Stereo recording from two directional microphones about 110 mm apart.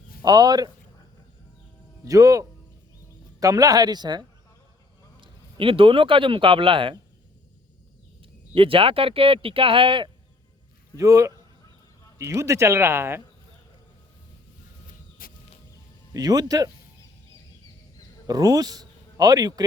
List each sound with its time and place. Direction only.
0.3 s speech: 40° right (ahead or behind)
2.0 s speech: 30° right (ahead or behind)
5.2 s a man's voice: 55° right (ahead or behind)
8.2 s speech: 55° right (ahead or behind)
10.9 s speech: 30° right (ahead or behind)
16.1 s speech: 35° right (ahead or behind)
18.3 s speech: 35° right (ahead or behind)